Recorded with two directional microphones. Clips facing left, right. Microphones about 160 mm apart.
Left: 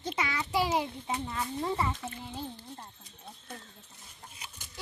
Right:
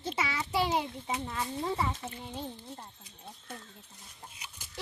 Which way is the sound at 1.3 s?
Centre (ahead or behind).